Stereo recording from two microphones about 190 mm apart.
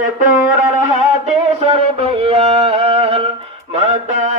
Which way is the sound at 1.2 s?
35° right (ahead or behind).